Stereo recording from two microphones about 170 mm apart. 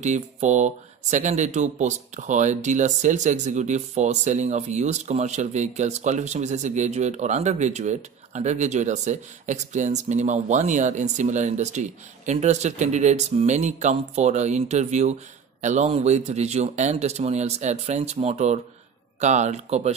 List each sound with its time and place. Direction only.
0.0 s a man's voice: 45° right (ahead or behind)